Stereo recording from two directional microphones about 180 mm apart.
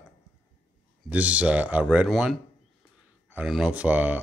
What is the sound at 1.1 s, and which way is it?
Speech, 5° right (ahead or behind).